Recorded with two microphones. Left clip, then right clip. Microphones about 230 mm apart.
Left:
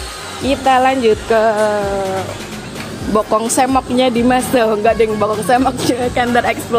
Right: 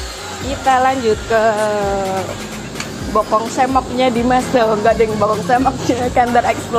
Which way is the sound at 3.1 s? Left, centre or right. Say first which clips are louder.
Left 1 dB; left.